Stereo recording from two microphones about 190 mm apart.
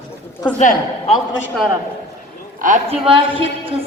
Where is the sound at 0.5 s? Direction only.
35° left (ahead or behind).